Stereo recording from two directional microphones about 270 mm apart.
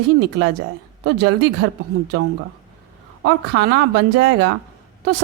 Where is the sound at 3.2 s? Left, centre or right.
Right.